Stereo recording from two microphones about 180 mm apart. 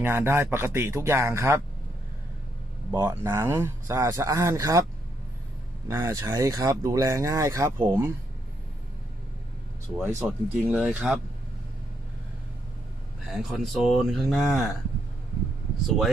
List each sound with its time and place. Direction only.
0.0 s speech: 15° right (ahead or behind)
2.9 s speech: 15° right (ahead or behind)
5.9 s speech: 15° right (ahead or behind)
10.2 s speech: 5° right (ahead or behind)
13.3 s speech: centre (ahead or behind)
15.9 s speech: centre (ahead or behind)